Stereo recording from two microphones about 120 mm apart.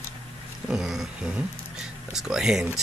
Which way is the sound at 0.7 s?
Centre (ahead or behind).